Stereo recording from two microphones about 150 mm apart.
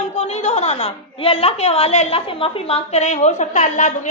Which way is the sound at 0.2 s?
45° left (ahead or behind).